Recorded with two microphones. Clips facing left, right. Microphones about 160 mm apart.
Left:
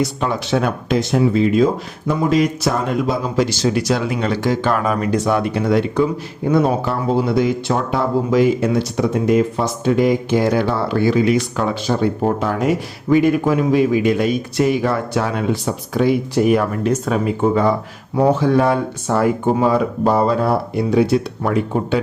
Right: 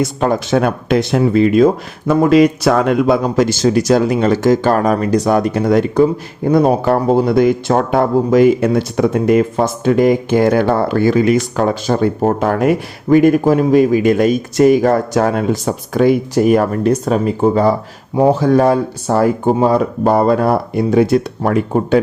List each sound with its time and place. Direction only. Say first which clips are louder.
0.0 s speech: right 4 dB; 45° right (ahead or behind); by 3.2 s 75° right (ahead or behind)
3.3 s speech: right 4 dB; 50° right (ahead or behind)
19.6 s speech: right 3 dB; 50° right (ahead or behind)